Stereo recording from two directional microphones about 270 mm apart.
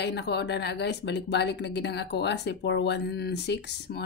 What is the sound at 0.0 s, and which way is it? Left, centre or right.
Speech, left.